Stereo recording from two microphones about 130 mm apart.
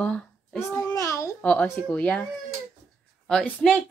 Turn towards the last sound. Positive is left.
turn(degrees=5)  # may be behind; listen again after turning